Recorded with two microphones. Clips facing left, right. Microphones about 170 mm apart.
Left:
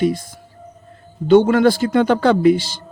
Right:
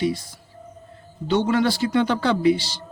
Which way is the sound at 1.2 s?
50° left (ahead or behind).